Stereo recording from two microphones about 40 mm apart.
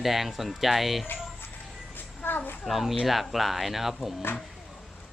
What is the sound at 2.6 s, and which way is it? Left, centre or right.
Speech, centre.